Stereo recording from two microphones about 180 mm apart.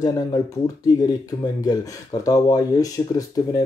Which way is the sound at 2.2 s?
20° left (ahead or behind).